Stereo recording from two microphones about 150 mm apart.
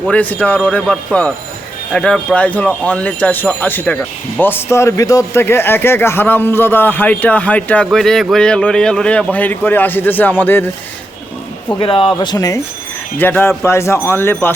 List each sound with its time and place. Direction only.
0.1 s a man's voice: 10° left (ahead or behind)
11.8 s speech: 35° left (ahead or behind)
13.1 s a man's voice: 15° left (ahead or behind)